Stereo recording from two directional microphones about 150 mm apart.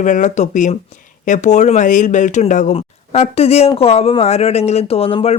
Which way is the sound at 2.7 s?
45° left (ahead or behind).